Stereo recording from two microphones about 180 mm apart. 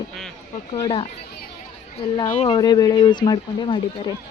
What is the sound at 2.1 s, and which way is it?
Speech, 35° left (ahead or behind).